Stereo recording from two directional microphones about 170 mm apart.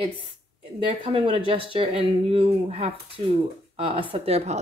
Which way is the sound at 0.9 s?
35° right (ahead or behind).